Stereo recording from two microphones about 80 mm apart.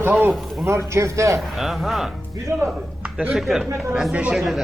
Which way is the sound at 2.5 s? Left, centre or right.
Right.